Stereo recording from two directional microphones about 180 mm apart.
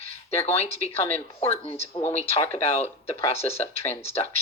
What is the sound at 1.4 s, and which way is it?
Speech, 35° left (ahead or behind).